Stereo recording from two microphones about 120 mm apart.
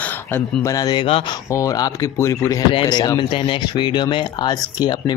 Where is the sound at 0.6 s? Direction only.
30° left (ahead or behind).